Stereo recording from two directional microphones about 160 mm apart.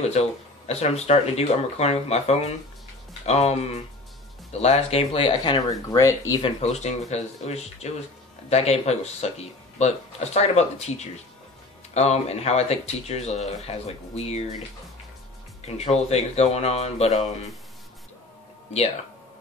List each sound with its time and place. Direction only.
0.0 s speech: 40° left (ahead or behind); by 6.4 s 20° left (ahead or behind)
6.4 s speech: 45° left (ahead or behind)
15.6 s speech: 40° left (ahead or behind)